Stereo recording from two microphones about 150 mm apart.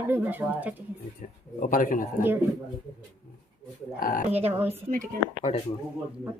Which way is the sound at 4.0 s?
65° left (ahead or behind).